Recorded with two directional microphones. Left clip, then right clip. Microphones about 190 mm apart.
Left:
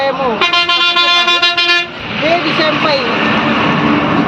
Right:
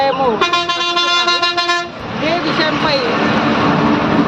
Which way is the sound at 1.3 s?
40° right (ahead or behind).